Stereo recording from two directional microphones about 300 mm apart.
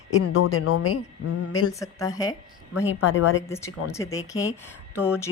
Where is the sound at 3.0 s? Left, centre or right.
Left.